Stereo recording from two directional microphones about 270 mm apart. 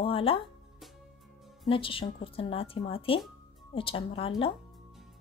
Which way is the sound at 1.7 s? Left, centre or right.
Centre.